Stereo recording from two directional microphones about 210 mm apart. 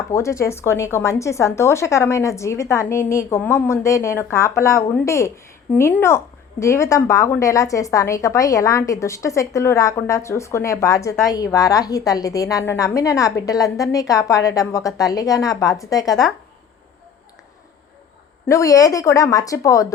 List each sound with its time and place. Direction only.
0.1 s speech: 15° left (ahead or behind)
18.4 s speech: 15° left (ahead or behind)